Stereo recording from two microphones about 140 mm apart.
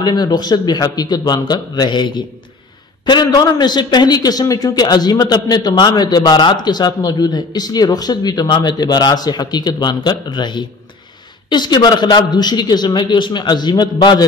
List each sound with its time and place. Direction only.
0.0 s a man's voice: 30° left (ahead or behind)